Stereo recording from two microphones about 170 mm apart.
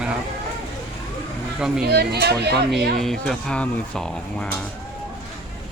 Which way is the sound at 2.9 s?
Centre (ahead or behind).